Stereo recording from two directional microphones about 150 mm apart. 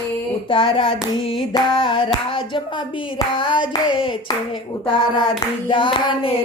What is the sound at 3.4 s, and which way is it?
Hands, 35° left (ahead or behind).